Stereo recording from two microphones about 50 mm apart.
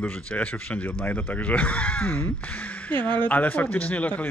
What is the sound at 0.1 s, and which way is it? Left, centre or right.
A man's voice, left.